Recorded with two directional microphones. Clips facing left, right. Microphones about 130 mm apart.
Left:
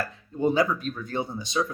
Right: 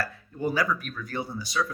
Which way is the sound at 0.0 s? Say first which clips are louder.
Left 4 dB; 20° left (ahead or behind).